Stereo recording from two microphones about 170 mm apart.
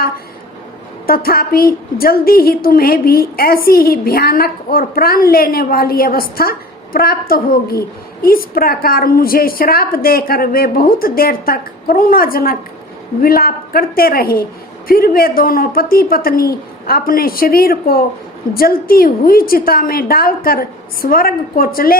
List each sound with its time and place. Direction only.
1.0 s a woman's voice: 60° left (ahead or behind)